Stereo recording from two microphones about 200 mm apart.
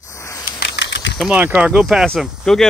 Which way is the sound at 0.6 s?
60° left (ahead or behind).